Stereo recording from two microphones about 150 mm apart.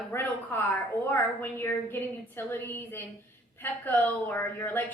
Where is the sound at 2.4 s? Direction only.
15° left (ahead or behind).